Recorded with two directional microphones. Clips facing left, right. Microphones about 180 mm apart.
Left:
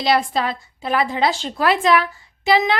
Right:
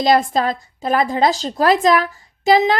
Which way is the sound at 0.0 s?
45° right (ahead or behind).